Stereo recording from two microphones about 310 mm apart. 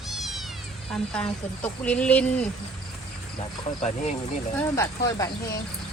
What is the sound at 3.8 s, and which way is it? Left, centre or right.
Speech, left.